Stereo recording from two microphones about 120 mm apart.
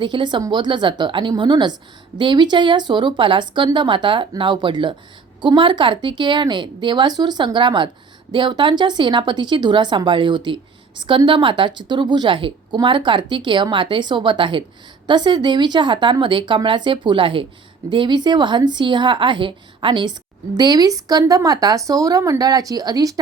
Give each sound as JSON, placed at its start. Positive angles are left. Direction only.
{"t": 0.0, "sound": "speech", "side_deg": -40}